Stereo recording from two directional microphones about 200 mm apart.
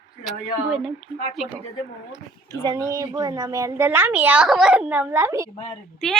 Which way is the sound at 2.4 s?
20° right (ahead or behind).